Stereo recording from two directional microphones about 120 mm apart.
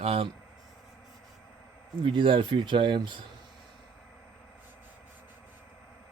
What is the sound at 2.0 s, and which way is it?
Speech, 45° right (ahead or behind).